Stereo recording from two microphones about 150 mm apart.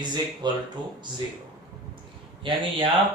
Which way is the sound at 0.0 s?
30° right (ahead or behind).